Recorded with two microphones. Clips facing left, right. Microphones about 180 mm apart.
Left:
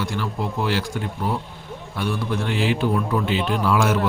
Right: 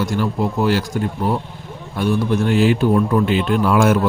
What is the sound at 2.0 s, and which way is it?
A man's voice, 45° right (ahead or behind).